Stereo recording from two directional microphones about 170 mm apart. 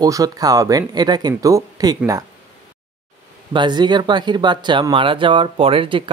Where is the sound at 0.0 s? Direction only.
20° right (ahead or behind).